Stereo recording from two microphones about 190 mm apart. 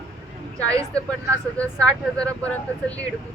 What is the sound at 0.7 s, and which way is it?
Speech, 15° right (ahead or behind).